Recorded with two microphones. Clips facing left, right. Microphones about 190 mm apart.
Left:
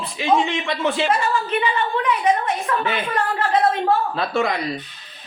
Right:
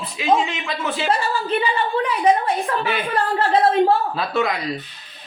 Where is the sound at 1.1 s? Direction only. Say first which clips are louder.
Even; 35° right (ahead or behind).